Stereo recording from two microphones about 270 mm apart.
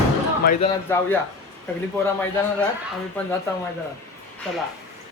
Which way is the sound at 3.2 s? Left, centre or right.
Centre.